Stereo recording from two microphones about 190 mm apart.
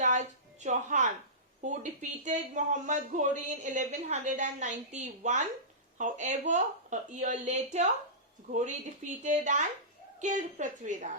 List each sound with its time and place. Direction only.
0.0 s a sound: 40° right (ahead or behind)
1.6 s speech: 40° right (ahead or behind)
9.2 s speech: 40° right (ahead or behind)